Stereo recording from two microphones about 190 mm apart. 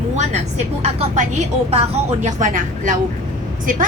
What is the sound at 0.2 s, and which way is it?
A woman's voice, 35° right (ahead or behind).